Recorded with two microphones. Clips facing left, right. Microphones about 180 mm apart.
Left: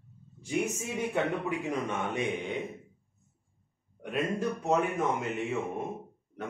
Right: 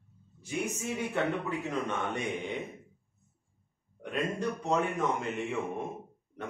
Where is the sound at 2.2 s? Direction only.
Centre (ahead or behind).